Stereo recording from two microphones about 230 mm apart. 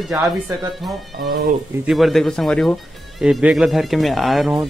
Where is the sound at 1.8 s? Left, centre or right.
Centre.